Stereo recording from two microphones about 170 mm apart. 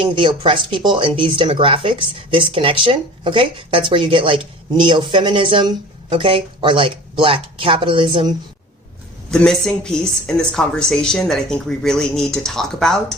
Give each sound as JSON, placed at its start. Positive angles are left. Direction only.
{"t": 0.0, "sound": "speech", "side_deg": -30}
{"t": 9.3, "sound": "a woman's voice", "side_deg": 5}